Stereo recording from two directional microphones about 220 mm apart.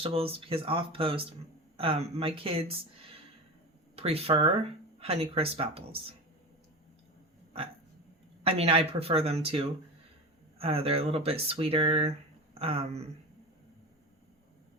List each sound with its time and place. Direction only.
0.0 s speech: 25° right (ahead or behind)
8.4 s speech: 25° right (ahead or behind)